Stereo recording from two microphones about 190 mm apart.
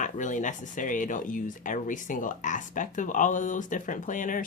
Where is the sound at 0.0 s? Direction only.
40° left (ahead or behind).